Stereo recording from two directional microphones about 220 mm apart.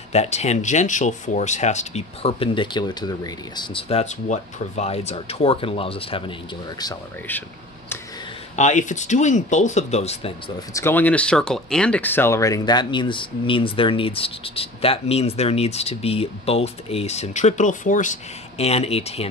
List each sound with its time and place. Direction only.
0.1 s speech: 30° left (ahead or behind)
6.8 s speech: 15° left (ahead or behind)
8.5 s speech: 35° left (ahead or behind)
10.7 s speech: 10° left (ahead or behind); by 19.2 s 25° left (ahead or behind)